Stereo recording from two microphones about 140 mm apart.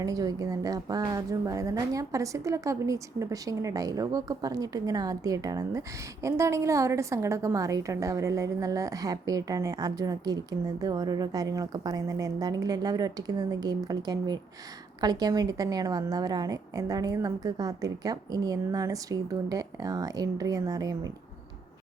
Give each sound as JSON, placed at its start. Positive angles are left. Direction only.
{"t": 0.0, "sound": "a woman's voice", "side_deg": -25}